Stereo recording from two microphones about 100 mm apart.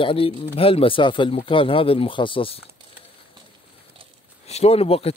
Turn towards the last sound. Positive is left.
turn(degrees=80)